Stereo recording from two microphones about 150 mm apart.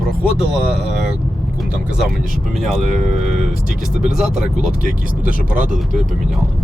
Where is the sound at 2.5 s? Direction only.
Centre (ahead or behind).